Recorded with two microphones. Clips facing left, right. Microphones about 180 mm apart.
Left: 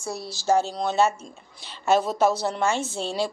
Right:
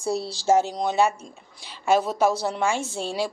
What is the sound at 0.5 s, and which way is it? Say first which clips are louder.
Speech: right 1 dB; 15° right (ahead or behind).